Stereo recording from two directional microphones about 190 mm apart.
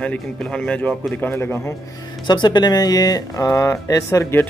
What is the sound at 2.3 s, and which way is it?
Speech, 25° left (ahead or behind).